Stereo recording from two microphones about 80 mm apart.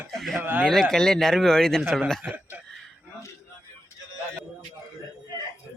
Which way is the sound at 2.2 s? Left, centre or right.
Right.